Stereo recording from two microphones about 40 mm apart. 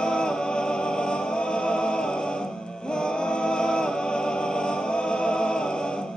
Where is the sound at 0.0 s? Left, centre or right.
Left.